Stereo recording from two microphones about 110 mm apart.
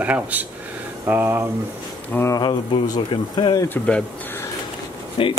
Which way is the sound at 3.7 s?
10° left (ahead or behind).